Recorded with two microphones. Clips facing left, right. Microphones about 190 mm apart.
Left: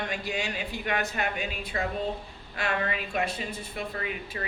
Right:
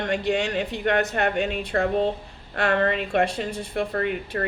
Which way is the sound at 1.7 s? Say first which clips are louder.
Right 8 dB; 70° right (ahead or behind).